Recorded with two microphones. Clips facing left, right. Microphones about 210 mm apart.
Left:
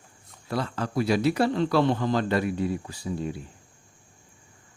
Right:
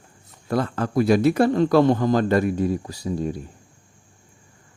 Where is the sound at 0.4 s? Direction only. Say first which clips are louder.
Right 6 dB; 50° right (ahead or behind).